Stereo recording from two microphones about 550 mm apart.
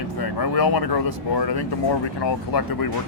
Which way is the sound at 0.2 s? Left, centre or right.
Left.